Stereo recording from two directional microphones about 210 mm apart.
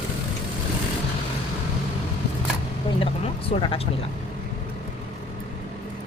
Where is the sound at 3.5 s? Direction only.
25° left (ahead or behind).